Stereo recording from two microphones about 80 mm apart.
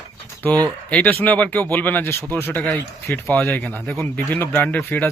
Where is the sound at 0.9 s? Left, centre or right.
Centre.